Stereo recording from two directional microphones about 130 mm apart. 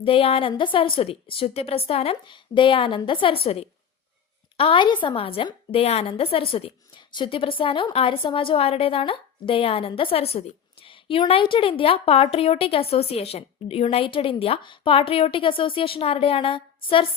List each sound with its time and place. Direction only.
0.0 s a woman's voice: 45° left (ahead or behind)